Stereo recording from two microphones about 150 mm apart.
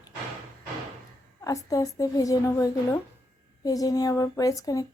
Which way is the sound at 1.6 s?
25° left (ahead or behind).